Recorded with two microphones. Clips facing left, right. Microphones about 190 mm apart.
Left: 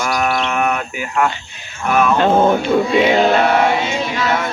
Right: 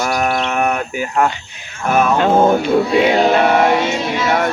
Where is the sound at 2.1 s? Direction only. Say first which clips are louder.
Right 1 dB; 10° right (ahead or behind).